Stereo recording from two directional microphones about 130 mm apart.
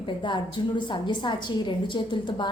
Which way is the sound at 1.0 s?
35° left (ahead or behind).